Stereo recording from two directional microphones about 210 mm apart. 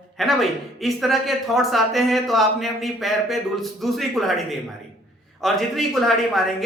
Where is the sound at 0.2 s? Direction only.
Centre (ahead or behind).